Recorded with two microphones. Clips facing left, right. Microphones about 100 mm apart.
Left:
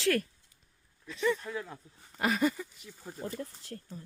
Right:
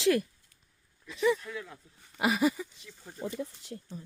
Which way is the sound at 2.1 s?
10° right (ahead or behind).